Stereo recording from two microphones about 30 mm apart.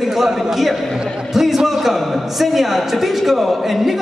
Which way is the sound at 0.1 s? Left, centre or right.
Centre.